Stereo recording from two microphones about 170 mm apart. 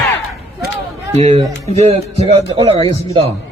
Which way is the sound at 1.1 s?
40° right (ahead or behind).